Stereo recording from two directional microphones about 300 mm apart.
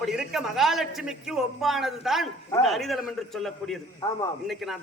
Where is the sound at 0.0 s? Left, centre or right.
Centre.